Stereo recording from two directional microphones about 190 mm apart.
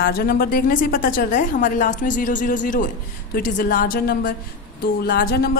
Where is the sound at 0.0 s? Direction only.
50° left (ahead or behind).